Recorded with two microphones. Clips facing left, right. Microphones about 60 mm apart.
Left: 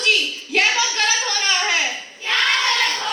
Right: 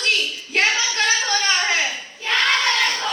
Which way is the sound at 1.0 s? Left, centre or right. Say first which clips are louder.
Right 1 dB; right.